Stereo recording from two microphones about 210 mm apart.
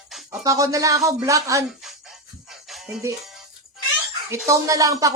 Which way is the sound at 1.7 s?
Centre (ahead or behind).